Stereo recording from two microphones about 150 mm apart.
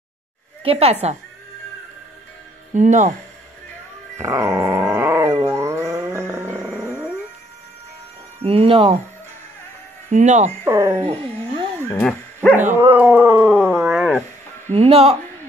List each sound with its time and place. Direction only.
0.7 s speech: 40° right (ahead or behind)
2.7 s speech: 55° right (ahead or behind)
4.2 s dog: 20° right (ahead or behind)
8.4 s speech: 40° right (ahead or behind)
10.0 s speech: 55° right (ahead or behind)
10.6 s speech: 20° right (ahead or behind)
11.0 s speech: 35° right (ahead or behind)
11.9 s speech: 10° left (ahead or behind)
12.7 s speech: 15° right (ahead or behind)
14.7 s speech: 40° right (ahead or behind)